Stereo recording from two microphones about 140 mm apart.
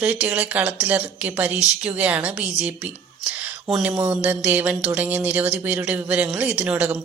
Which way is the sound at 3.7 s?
Centre (ahead or behind).